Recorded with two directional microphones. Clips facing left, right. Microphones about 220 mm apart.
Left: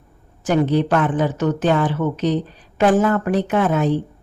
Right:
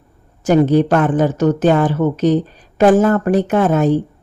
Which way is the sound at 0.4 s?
45° right (ahead or behind).